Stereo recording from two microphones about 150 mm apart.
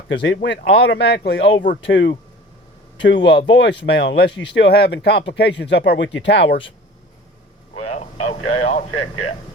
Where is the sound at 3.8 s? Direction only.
90° left.